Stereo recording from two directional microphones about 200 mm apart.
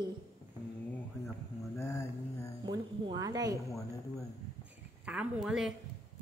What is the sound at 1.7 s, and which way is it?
Speech, 15° left (ahead or behind).